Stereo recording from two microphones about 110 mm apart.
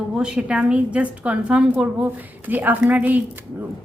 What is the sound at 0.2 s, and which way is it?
A woman's voice, 10° right (ahead or behind).